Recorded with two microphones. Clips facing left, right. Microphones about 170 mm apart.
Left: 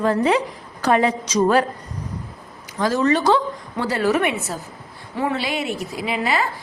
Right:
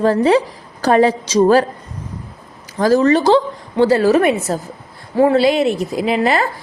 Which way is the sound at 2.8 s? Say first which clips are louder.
Right 6 dB; 35° right (ahead or behind).